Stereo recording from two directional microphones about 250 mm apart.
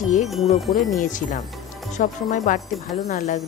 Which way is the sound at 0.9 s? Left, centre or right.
Left.